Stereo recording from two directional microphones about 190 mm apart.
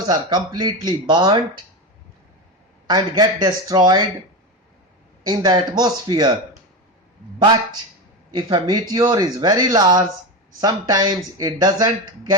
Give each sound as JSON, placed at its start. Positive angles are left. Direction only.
{"t": 0.1, "sound": "speech", "side_deg": -20}
{"t": 2.8, "sound": "speech", "side_deg": -20}
{"t": 5.3, "sound": "speech", "side_deg": -20}
{"t": 7.3, "sound": "speech", "side_deg": -20}